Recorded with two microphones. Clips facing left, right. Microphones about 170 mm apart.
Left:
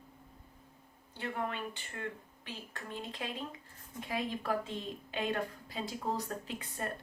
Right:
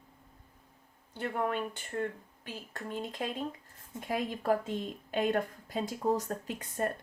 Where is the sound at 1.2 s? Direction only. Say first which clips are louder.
Right 5 dB; 45° right (ahead or behind).